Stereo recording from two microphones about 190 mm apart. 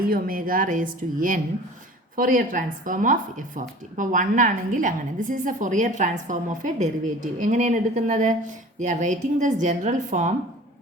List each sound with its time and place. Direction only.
0.0 s speech: 50° right (ahead or behind)